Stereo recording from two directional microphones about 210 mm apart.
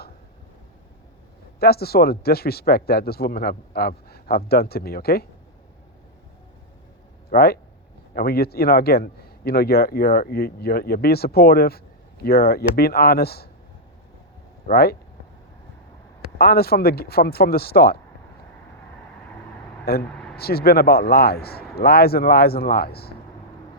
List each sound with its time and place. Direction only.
1.5 s a man's voice: 45° left (ahead or behind)
7.3 s a man's voice: 45° left (ahead or behind)
14.7 s a man's voice: 45° left (ahead or behind)
16.4 s a man's voice: 45° left (ahead or behind)
19.8 s a man's voice: 45° left (ahead or behind)